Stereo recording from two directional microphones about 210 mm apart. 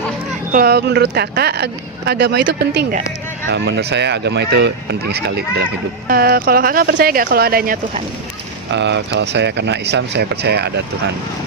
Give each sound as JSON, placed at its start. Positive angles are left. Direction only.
{"t": 0.5, "sound": "speech", "side_deg": -45}
{"t": 8.7, "sound": "speech", "side_deg": -55}